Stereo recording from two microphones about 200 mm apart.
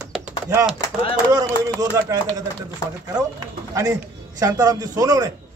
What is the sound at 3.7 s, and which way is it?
Speech, 20° right (ahead or behind).